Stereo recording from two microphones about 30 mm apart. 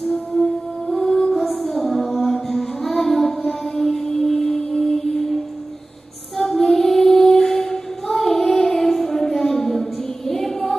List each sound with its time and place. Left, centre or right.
0.1 s music: centre
6.3 s female singing: centre